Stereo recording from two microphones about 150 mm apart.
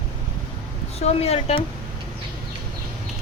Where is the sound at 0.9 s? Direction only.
45° left (ahead or behind).